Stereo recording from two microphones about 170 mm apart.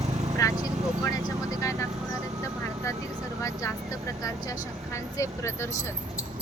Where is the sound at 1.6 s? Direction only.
20° left (ahead or behind).